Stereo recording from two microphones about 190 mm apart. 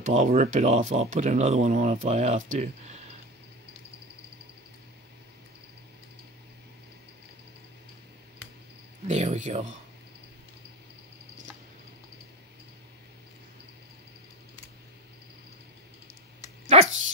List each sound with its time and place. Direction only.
0.0 s speech: 35° right (ahead or behind)
9.0 s speech: 35° right (ahead or behind)
16.7 s dog: 35° right (ahead or behind)